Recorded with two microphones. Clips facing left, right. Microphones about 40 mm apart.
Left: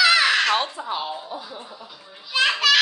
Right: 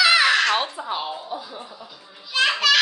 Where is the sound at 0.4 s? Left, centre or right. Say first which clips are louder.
Even; centre.